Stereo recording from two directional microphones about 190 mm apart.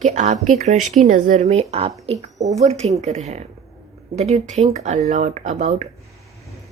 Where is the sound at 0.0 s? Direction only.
40° right (ahead or behind).